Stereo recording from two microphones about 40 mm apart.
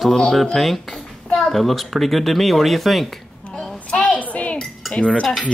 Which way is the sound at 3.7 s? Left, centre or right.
Left.